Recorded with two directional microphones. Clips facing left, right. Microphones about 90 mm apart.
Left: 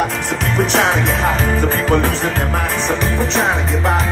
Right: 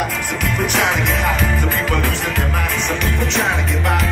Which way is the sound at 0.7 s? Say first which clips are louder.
Left 3 dB; 35° left (ahead or behind).